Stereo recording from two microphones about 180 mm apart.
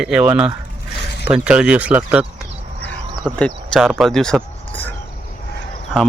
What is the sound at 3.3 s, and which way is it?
Speech, 5° left (ahead or behind).